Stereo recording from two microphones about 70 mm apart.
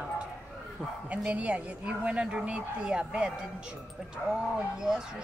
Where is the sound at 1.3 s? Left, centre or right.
Centre.